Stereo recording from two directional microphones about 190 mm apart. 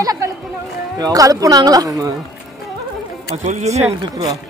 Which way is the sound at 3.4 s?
35° right (ahead or behind).